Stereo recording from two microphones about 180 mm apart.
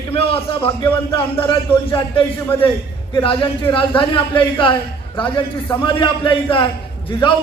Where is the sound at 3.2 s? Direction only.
30° left (ahead or behind).